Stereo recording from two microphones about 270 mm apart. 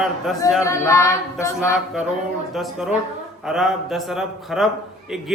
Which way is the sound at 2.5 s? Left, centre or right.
Centre.